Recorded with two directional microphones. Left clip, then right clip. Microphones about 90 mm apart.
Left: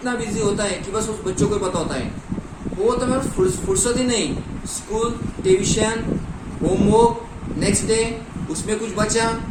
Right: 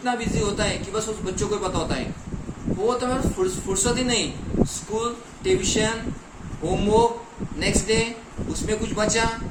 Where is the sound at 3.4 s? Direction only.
35° right (ahead or behind).